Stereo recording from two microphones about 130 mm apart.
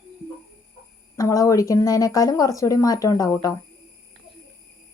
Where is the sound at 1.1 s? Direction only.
25° left (ahead or behind).